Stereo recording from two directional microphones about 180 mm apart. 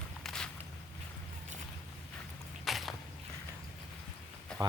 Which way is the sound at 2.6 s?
Centre (ahead or behind).